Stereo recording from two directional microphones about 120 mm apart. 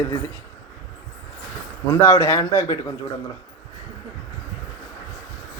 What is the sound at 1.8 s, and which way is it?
A man's voice, 20° left (ahead or behind).